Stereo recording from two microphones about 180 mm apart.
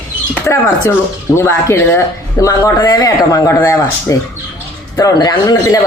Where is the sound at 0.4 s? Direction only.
15° left (ahead or behind).